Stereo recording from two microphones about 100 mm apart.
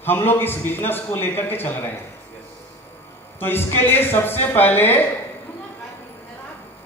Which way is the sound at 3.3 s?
20° left (ahead or behind).